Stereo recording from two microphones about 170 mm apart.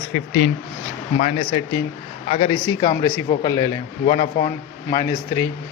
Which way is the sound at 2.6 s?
25° left (ahead or behind).